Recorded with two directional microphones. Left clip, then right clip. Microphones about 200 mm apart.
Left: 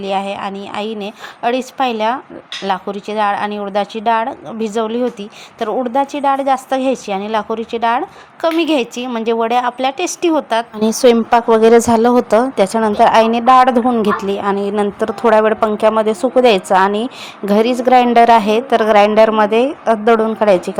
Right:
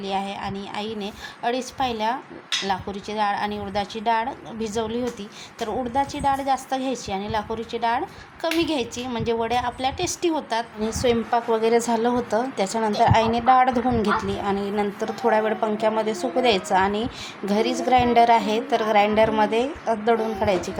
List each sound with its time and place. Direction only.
0.0 s a woman's voice: 30° left (ahead or behind)